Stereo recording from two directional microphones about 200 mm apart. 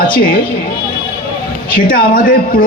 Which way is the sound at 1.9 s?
45° left (ahead or behind).